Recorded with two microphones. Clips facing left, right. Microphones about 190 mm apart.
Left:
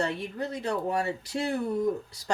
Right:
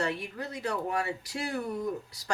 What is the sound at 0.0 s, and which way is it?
Speech, 25° left (ahead or behind).